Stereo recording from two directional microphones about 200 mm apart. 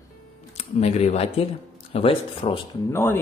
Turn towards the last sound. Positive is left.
turn(degrees=15)  # may be behind; listen again after turning